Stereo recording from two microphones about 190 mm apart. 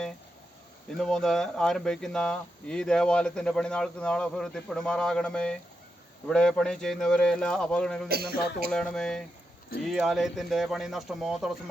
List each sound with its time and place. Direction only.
0.9 s speech: centre (ahead or behind)
8.0 s speech: 55° right (ahead or behind)
8.7 s speech: 5° left (ahead or behind)